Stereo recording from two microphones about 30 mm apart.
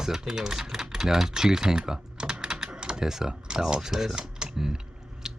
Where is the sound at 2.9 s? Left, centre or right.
Centre.